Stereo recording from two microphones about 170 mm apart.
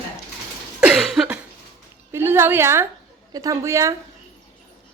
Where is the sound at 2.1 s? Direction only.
15° right (ahead or behind).